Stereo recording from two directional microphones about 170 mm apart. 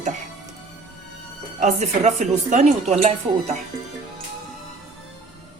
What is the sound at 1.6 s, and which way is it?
Speech, 45° right (ahead or behind).